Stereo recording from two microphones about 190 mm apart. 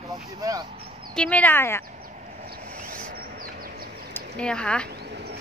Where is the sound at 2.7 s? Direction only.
50° right (ahead or behind).